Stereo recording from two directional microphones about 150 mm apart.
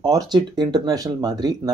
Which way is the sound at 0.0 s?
30° right (ahead or behind).